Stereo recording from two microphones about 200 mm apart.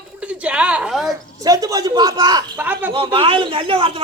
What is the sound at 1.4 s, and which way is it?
A man's voice, 15° right (ahead or behind).